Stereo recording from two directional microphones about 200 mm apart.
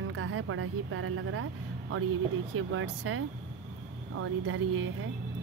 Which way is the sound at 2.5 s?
85° right.